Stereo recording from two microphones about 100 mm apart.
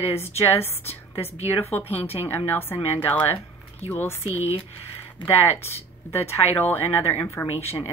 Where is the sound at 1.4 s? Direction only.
90° left.